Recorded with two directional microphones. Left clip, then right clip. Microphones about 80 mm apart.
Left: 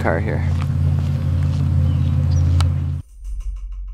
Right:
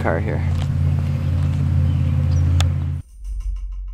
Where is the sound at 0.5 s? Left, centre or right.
Centre.